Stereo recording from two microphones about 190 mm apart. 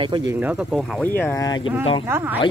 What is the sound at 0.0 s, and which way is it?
Speech, 20° right (ahead or behind).